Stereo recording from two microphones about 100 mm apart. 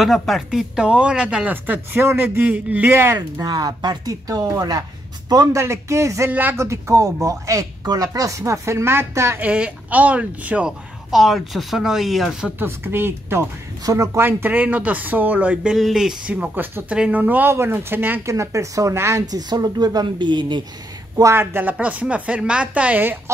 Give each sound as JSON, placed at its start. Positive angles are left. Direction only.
{"t": 0.0, "sound": "speech", "side_deg": 0}
{"t": 3.2, "sound": "speech", "side_deg": -40}
{"t": 5.6, "sound": "speech", "side_deg": -30}
{"t": 9.4, "sound": "speech", "side_deg": -10}
{"t": 12.5, "sound": "speech", "side_deg": -20}
{"t": 13.8, "sound": "speech", "side_deg": -35}
{"t": 14.2, "sound": "speech", "side_deg": -20}
{"t": 15.7, "sound": "speech", "side_deg": -5}
{"t": 18.3, "sound": "speech", "side_deg": -30}
{"t": 19.3, "sound": "a woman's voice", "side_deg": -40}
{"t": 21.2, "sound": "speech", "side_deg": -25}